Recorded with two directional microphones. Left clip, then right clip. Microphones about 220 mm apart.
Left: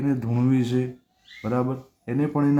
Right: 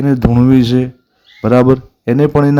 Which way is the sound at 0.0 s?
35° right (ahead or behind).